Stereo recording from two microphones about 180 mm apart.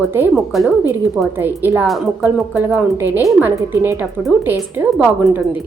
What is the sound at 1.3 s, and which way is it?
A woman's voice, 10° right (ahead or behind).